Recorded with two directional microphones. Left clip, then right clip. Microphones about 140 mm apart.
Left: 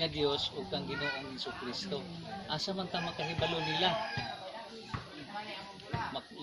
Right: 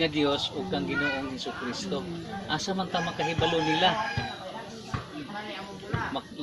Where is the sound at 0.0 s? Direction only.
20° left (ahead or behind).